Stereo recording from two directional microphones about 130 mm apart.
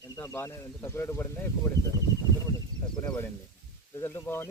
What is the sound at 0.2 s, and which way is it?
Speech, 20° left (ahead or behind).